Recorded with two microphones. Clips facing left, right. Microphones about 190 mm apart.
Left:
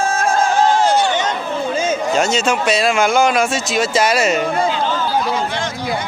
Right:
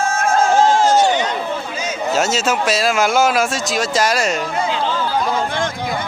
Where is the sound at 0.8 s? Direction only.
45° right (ahead or behind).